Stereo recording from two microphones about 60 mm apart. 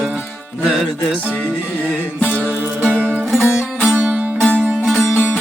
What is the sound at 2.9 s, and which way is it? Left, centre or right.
Music, right.